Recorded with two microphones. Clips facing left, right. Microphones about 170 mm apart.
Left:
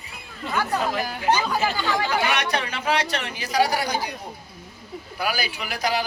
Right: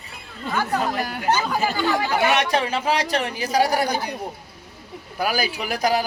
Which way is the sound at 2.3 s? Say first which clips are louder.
Right 5 dB; 30° right (ahead or behind).